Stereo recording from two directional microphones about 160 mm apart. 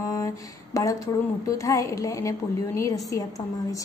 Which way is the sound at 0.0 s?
20° left (ahead or behind).